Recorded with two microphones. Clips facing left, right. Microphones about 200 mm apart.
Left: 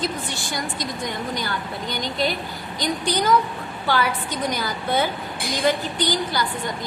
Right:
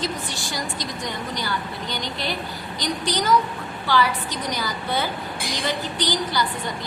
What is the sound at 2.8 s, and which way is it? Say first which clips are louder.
Speech: left 2 dB; 55° left (ahead or behind).